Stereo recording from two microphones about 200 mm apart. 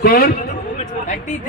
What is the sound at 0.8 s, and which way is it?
Speech, 35° left (ahead or behind).